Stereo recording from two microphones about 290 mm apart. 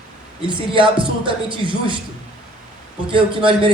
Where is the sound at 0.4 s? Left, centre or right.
Centre.